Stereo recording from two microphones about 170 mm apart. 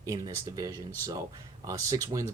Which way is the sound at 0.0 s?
20° right (ahead or behind).